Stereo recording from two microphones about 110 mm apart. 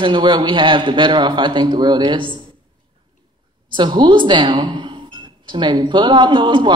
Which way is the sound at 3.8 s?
45° right (ahead or behind).